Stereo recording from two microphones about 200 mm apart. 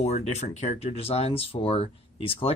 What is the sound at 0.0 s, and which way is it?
Speech, 35° left (ahead or behind).